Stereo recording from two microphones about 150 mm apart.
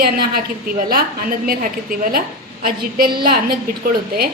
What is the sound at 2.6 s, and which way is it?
A woman's voice, 85° right.